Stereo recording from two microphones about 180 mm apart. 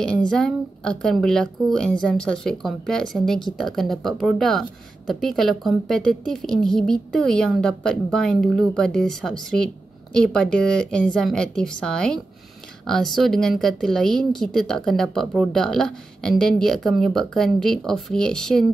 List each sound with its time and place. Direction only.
0.3 s a woman's voice: 5° left (ahead or behind)